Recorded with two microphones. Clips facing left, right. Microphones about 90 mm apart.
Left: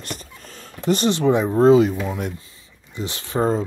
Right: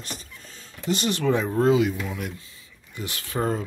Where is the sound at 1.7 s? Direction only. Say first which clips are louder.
Left 8 dB; 35° left (ahead or behind).